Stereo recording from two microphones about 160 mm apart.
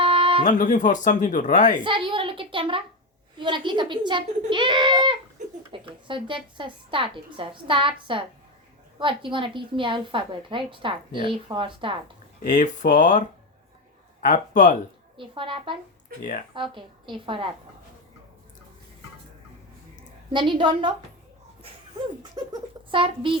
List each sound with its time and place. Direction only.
0.0 s music: 35° right (ahead or behind)
0.4 s speech: 50° left (ahead or behind)
1.8 s a woman's voice: 30° right (ahead or behind)
12.4 s speech: 50° left (ahead or behind)
15.2 s a woman's voice: 35° right (ahead or behind)
20.3 s a woman's voice: 30° right (ahead or behind)
22.4 s a sound: 25° right (ahead or behind)
22.9 s a woman's voice: 35° right (ahead or behind)